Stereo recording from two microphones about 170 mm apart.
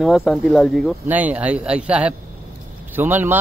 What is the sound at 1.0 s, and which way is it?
Speech, 10° right (ahead or behind).